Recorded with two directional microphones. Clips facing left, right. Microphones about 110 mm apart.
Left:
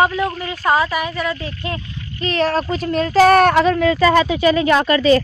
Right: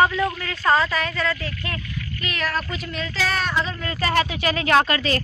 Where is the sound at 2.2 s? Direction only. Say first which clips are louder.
Left 10 dB; 35° left (ahead or behind); by 3.9 s 70° left (ahead or behind).